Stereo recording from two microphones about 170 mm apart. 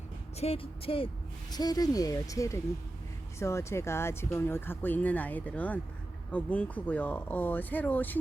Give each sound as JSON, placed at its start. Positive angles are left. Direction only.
{"t": 0.3, "sound": "speech", "side_deg": 35}